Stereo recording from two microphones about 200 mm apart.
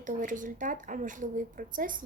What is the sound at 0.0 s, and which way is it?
Speech, 40° right (ahead or behind).